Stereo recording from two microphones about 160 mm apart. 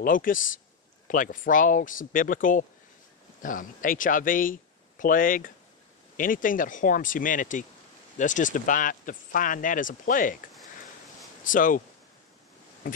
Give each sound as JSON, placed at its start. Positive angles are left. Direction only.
{"t": 0.0, "sound": "speech", "side_deg": 60}
{"t": 11.4, "sound": "speech", "side_deg": 55}